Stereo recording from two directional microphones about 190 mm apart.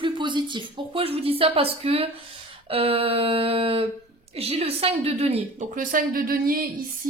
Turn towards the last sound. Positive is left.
turn(degrees=-50)  # may be behind; listen again after turning